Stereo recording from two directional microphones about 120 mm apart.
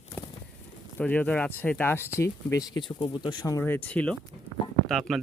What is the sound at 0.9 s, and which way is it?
Speech, 10° left (ahead or behind).